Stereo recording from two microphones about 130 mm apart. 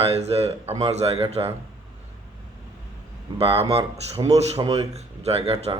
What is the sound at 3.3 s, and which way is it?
A man's voice, 50° right (ahead or behind).